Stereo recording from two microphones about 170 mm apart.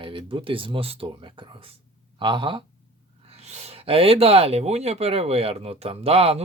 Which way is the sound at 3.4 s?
40° right (ahead or behind).